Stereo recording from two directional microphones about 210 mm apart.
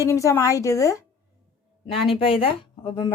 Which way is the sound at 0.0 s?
15° left (ahead or behind).